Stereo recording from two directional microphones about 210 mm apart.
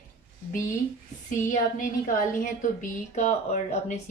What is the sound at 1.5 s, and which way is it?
A woman's voice, 40° left (ahead or behind).